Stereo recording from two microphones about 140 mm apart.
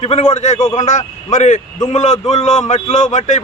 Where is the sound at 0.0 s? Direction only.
50° left (ahead or behind).